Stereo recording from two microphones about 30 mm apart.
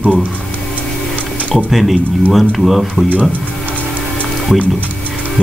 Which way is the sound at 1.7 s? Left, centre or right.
Centre.